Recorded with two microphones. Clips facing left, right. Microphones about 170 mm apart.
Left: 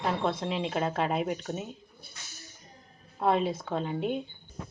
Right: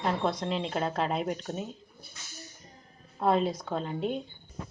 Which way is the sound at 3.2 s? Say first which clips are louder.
Even; centre (ahead or behind).